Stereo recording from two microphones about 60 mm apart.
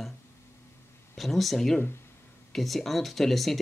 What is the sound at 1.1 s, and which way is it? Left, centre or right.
Speech, centre.